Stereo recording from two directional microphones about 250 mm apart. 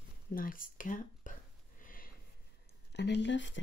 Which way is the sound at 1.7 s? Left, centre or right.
Left.